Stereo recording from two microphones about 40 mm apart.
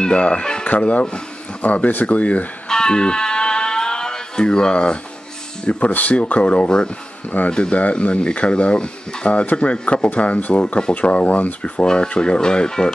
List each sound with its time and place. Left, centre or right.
0.0 s speech: left
2.7 s music: centre
4.4 s speech: left
5.9 s speech: left
6.3 s speech: left
7.2 s speech: left
11.8 s speech: centre